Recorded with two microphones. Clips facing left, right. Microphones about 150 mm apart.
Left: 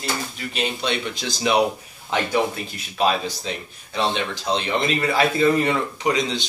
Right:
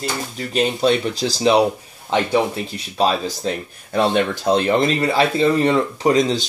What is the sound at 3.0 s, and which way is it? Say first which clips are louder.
Speech: right 3 dB; 45° right (ahead or behind).